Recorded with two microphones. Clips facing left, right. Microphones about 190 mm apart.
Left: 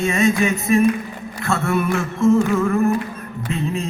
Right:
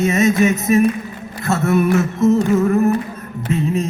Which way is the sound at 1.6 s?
40° right (ahead or behind).